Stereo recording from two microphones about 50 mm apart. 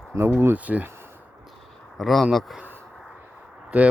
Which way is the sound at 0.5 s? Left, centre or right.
Right.